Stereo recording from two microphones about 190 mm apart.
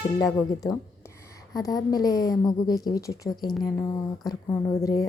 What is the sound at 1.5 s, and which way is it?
A woman's voice, 20° left (ahead or behind).